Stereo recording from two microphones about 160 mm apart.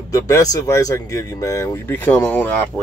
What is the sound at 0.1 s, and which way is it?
Speech, 20° left (ahead or behind).